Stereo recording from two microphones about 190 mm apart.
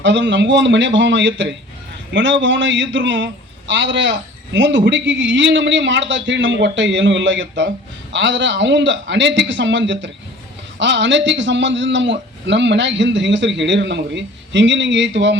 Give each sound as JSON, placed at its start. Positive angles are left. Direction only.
{"t": 0.0, "sound": "a man's voice", "side_deg": -70}